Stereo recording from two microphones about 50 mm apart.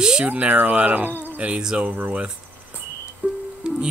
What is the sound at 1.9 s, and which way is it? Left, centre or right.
Speech, right.